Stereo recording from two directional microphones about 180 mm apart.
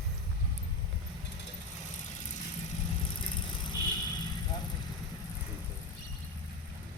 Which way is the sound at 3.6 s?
25° left (ahead or behind).